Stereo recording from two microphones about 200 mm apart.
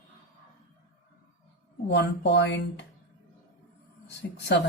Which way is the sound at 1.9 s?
60° left (ahead or behind).